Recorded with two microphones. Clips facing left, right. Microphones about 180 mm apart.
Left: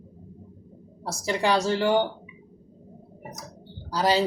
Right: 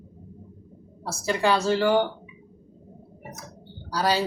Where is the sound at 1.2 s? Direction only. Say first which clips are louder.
Right 1 dB; 20° left (ahead or behind).